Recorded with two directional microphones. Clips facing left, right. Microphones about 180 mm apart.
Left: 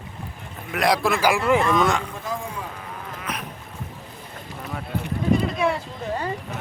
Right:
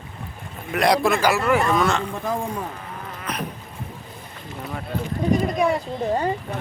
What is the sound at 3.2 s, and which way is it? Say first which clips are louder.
Rowboat: right 4 dB; 5° left (ahead or behind).